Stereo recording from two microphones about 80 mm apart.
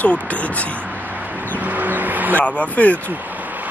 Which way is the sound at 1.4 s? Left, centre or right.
Right.